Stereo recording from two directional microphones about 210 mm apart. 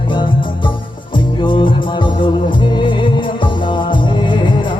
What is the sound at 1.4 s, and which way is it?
Music, 25° left (ahead or behind).